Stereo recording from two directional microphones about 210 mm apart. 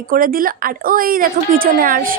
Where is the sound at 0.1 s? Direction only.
45° right (ahead or behind).